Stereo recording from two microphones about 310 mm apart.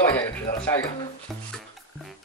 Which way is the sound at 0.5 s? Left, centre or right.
Centre.